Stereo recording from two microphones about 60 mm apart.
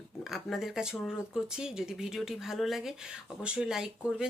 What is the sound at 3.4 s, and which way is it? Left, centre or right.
Speech, centre.